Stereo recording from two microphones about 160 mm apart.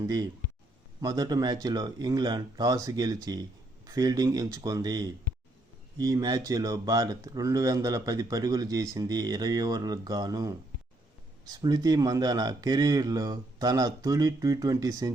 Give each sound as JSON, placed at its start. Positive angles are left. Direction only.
{"t": 0.0, "sound": "speech", "side_deg": -25}